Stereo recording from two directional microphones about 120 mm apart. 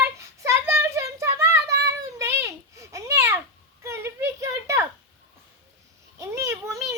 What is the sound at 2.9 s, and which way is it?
Babbling, 25° right (ahead or behind).